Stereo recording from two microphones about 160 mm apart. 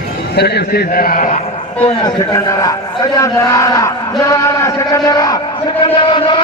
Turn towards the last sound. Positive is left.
turn(degrees=30)  # may be behind; listen again after turning